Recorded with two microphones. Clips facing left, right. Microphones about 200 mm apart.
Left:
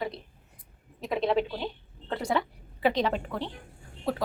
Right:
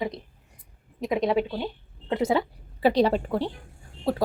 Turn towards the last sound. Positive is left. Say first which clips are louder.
# right 4 dB
turn(degrees=-35)  # may be behind; listen again after turning